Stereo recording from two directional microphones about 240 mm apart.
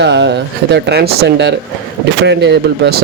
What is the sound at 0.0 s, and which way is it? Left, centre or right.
Speech, right.